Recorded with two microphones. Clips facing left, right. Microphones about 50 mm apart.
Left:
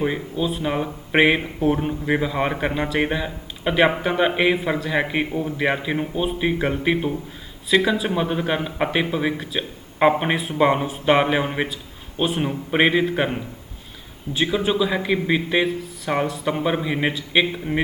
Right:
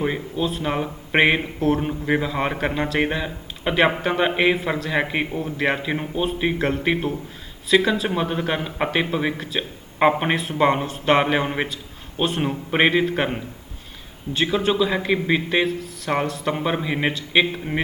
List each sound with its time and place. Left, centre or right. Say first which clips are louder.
0.0 s speech: left 1 dB; centre
1.5 s speech: even; centre
1.8 s speech: even; centre
12.4 s speech: even; centre